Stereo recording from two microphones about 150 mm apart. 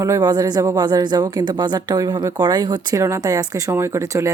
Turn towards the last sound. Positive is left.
turn(degrees=-20)  # may be behind; listen again after turning